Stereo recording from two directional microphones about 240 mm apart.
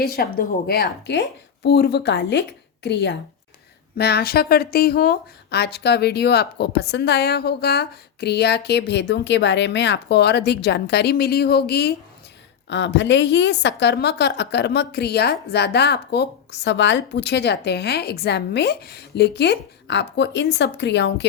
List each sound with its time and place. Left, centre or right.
0.0 s a woman's voice: left